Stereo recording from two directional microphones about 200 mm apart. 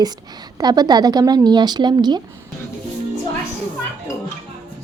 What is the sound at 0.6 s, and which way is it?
A woman's voice, 20° right (ahead or behind).